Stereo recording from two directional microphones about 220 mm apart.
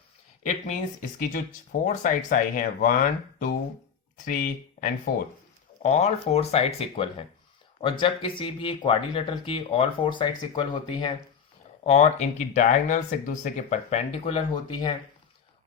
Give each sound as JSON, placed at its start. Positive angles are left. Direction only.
{"t": 1.2, "sound": "speech", "side_deg": 35}